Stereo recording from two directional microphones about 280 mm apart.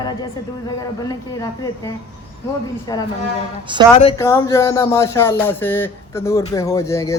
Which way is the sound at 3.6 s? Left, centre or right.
Centre.